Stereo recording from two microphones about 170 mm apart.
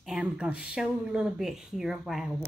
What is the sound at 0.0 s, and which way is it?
A woman's voice, 5° right (ahead or behind).